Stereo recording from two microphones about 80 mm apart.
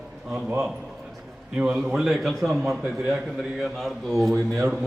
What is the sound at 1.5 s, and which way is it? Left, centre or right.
A man's voice, centre.